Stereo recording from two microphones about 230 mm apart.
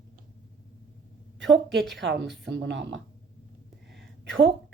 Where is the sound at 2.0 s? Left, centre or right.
Right.